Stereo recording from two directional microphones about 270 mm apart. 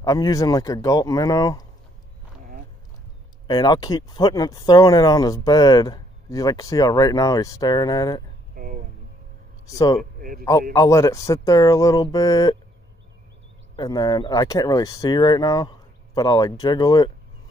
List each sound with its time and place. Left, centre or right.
0.0 s speech: centre
3.4 s speech: centre
8.5 s a sound: right
10.1 s a sound: right
10.7 s speech: centre
13.7 s speech: centre